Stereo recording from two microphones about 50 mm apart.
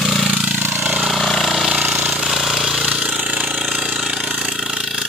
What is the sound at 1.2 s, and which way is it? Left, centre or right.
Vehicle, centre.